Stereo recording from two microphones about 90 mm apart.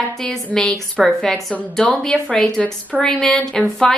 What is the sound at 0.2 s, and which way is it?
A woman's voice, 10° left (ahead or behind).